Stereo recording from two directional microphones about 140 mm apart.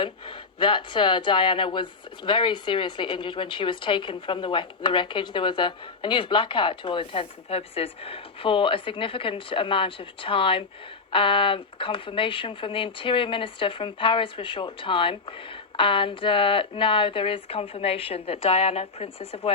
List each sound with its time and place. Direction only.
0.0 s speech: 35° left (ahead or behind)